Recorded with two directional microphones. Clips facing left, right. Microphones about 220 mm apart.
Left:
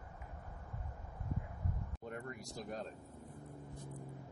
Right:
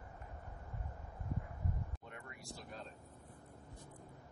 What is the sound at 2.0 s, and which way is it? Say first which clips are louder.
Vehicle: left 7 dB; 40° left (ahead or behind).